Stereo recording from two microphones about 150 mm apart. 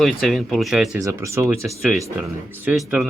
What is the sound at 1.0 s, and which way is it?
Speech, 20° right (ahead or behind).